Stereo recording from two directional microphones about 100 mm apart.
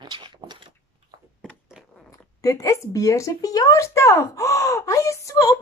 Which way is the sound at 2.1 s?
35° left (ahead or behind).